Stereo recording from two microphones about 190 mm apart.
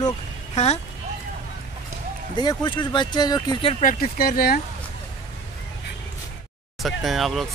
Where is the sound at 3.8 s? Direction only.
45° left (ahead or behind).